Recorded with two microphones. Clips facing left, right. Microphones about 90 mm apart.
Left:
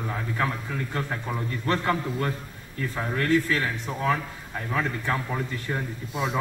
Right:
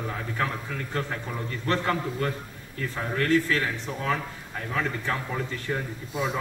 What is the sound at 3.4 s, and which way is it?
A man's voice, 15° left (ahead or behind).